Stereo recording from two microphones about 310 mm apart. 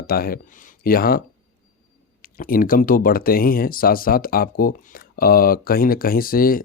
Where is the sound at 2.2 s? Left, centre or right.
Left.